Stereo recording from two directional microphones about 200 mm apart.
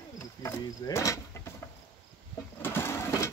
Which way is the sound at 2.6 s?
10° left (ahead or behind).